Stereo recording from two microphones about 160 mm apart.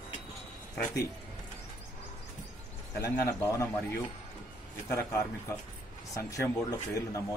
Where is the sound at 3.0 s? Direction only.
20° left (ahead or behind).